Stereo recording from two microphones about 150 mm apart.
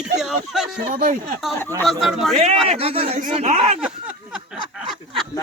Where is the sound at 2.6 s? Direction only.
45° right (ahead or behind).